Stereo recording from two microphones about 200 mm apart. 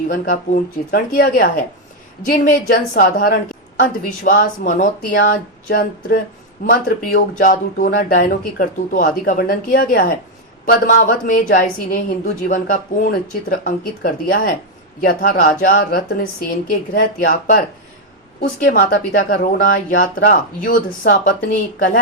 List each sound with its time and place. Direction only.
0.1 s a woman's voice: 45° left (ahead or behind)